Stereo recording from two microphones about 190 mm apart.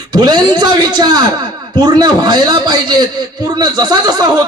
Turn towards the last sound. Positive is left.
turn(degrees=-20)  # may be behind; listen again after turning